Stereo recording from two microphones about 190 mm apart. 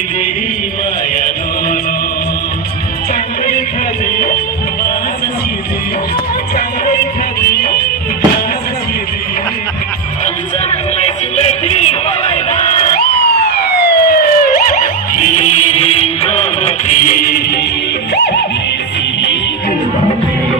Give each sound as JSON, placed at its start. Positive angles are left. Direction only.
{"t": 7.5, "sound": "music", "side_deg": 55}
{"t": 10.2, "sound": "music", "side_deg": 35}
{"t": 13.8, "sound": "police car", "side_deg": 55}
{"t": 18.1, "sound": "music", "side_deg": 60}